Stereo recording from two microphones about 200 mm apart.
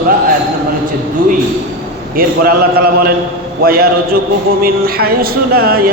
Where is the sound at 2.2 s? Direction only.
45° right (ahead or behind).